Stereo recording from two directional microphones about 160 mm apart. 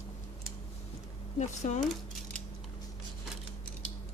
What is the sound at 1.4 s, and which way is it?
Speech, 45° left (ahead or behind).